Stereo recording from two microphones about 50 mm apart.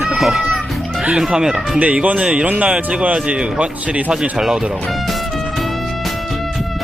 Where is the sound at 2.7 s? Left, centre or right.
Centre.